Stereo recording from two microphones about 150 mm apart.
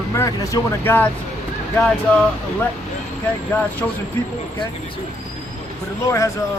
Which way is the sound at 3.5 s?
15° left (ahead or behind).